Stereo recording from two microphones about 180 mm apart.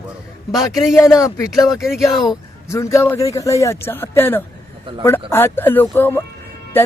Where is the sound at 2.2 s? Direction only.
20° left (ahead or behind).